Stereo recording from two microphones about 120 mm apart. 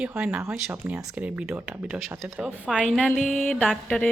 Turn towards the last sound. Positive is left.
turn(degrees=10)  # may be behind; listen again after turning